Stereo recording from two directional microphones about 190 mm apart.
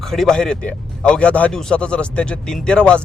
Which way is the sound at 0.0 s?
Centre (ahead or behind).